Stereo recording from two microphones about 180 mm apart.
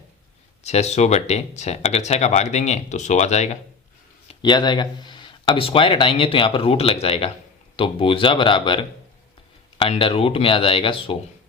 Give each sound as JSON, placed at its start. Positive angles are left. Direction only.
{"t": 0.6, "sound": "speech", "side_deg": 35}
{"t": 4.3, "sound": "speech", "side_deg": 25}